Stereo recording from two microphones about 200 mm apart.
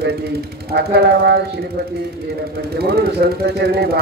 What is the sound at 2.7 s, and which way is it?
Speech, 50° right (ahead or behind).